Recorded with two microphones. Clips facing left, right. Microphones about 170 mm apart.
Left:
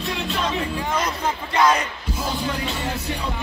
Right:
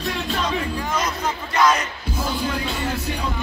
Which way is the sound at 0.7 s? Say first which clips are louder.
Even; 30° left (ahead or behind).